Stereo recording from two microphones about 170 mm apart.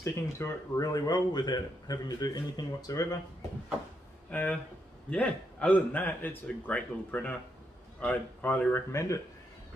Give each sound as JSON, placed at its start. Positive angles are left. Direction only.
{"t": 0.0, "sound": "a man's voice", "side_deg": 15}
{"t": 4.3, "sound": "speech", "side_deg": 10}